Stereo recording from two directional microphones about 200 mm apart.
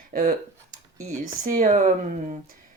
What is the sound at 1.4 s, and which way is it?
Speech, 40° right (ahead or behind).